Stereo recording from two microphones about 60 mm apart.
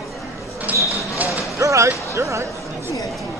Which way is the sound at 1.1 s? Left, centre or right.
Right.